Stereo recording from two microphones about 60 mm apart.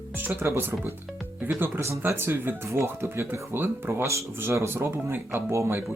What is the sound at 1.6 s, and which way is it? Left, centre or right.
Speech, right.